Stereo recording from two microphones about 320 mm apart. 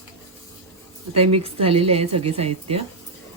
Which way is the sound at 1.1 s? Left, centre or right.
Centre.